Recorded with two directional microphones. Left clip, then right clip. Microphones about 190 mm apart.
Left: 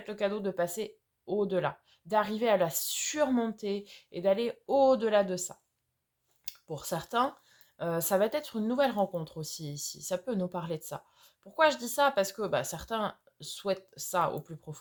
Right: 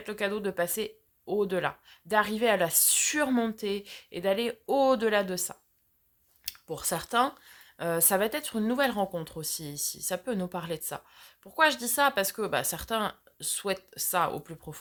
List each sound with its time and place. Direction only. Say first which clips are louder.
0.0 s speech: right 1 dB; 25° right (ahead or behind)